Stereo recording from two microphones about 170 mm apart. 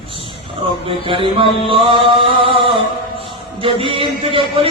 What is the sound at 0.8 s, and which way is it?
Speech, 30° right (ahead or behind).